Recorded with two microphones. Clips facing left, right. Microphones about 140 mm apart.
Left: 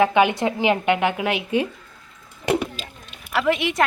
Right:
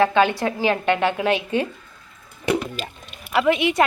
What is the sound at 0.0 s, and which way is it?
A woman's voice, 15° left (ahead or behind).